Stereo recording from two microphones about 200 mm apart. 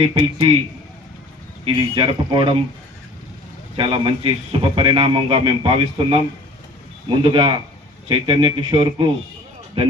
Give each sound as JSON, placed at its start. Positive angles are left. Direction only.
{"t": 0.1, "sound": "a man's voice", "side_deg": -25}
{"t": 1.6, "sound": "a man's voice", "side_deg": -25}
{"t": 3.8, "sound": "a man's voice", "side_deg": -25}